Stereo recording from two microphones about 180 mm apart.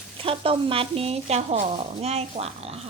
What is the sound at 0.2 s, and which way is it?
Speech, 30° right (ahead or behind).